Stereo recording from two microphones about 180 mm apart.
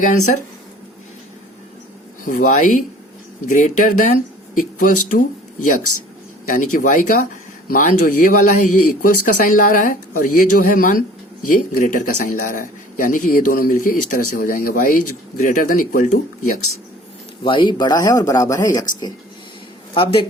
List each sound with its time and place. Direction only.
0.0 s a man's voice: 45° left (ahead or behind)
2.2 s a man's voice: 45° left (ahead or behind)
17.4 s speech: 30° left (ahead or behind)